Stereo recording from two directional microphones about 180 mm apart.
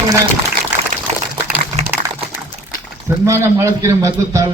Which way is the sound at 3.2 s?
15° right (ahead or behind).